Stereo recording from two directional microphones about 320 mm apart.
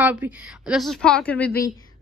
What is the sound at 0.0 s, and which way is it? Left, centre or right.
A woman's voice, centre.